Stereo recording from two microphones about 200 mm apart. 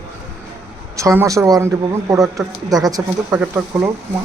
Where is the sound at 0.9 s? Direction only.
15° right (ahead or behind).